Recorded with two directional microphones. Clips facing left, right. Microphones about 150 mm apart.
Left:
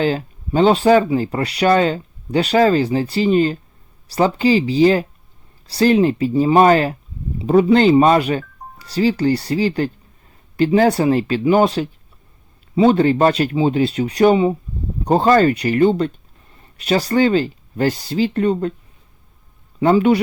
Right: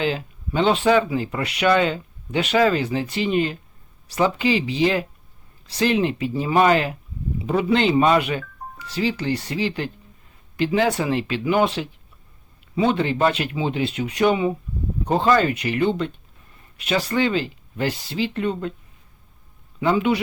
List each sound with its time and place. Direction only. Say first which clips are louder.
0.0 s speech: left 5 dB; 40° left (ahead or behind)
19.8 s speech: left 6 dB; 45° left (ahead or behind)